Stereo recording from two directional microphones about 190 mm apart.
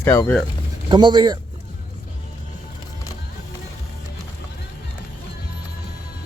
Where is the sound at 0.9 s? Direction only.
25° right (ahead or behind).